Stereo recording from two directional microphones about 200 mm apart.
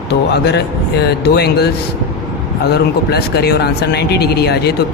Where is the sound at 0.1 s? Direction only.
60° left (ahead or behind).